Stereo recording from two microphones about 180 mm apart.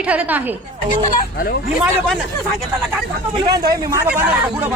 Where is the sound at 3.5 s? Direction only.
60° right (ahead or behind).